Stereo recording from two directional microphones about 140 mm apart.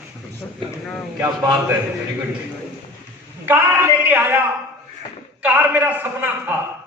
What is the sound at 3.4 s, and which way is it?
A man's voice, 15° right (ahead or behind).